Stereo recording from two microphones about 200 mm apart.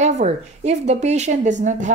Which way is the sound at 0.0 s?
35° right (ahead or behind).